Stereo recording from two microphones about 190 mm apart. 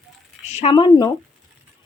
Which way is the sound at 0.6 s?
30° left (ahead or behind).